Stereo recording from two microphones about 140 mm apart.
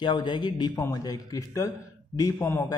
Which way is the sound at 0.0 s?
35° left (ahead or behind).